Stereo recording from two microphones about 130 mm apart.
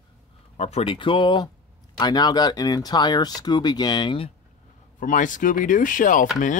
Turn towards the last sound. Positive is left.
turn(degrees=90)